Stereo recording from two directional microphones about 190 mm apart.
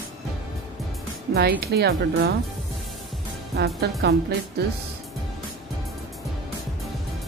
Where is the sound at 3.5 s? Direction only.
60° right (ahead or behind).